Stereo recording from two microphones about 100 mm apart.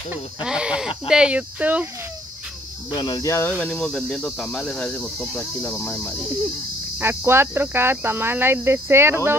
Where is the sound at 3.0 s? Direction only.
40° left (ahead or behind).